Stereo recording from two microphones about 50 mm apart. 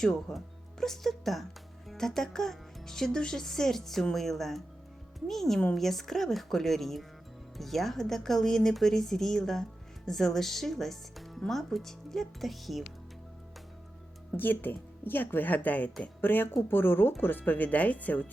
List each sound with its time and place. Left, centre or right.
0.0 s speech: centre
14.3 s speech: left